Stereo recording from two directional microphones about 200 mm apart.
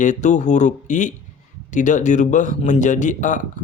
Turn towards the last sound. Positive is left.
turn(degrees=40)  # may be behind; listen again after turning